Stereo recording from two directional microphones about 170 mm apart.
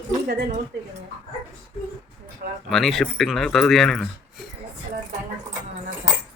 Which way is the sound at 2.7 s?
Centre (ahead or behind).